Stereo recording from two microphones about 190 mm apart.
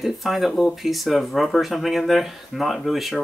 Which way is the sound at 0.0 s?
Centre (ahead or behind).